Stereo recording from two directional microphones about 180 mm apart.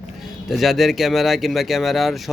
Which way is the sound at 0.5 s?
Centre (ahead or behind).